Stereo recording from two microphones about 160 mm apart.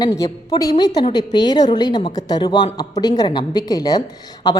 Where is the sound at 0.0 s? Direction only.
25° left (ahead or behind).